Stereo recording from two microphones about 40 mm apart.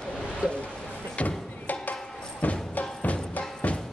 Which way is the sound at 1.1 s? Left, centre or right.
Left.